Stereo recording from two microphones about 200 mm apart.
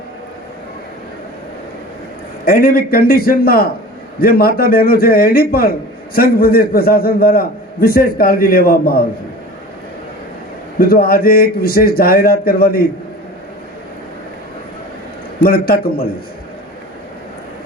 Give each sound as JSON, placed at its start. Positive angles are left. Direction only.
{"t": 2.4, "sound": "a man's voice", "side_deg": 45}
{"t": 10.8, "sound": "a man's voice", "side_deg": 50}
{"t": 15.4, "sound": "a man's voice", "side_deg": 50}